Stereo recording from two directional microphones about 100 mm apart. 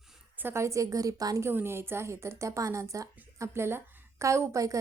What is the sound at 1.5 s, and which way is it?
A woman's voice, 25° right (ahead or behind).